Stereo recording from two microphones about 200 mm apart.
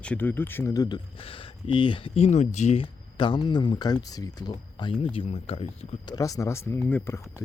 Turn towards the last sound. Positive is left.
turn(degrees=10)  # may be behind; listen again after turning